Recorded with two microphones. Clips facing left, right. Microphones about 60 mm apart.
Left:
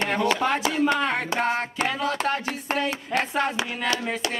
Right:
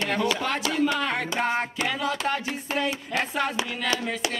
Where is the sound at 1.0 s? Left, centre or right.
Centre.